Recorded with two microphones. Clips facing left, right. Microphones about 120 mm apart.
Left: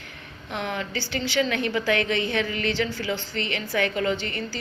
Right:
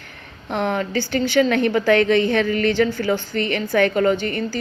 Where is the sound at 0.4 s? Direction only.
50° right (ahead or behind).